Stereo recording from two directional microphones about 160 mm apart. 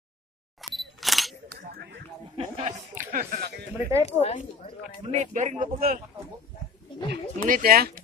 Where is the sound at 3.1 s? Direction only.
75° right (ahead or behind).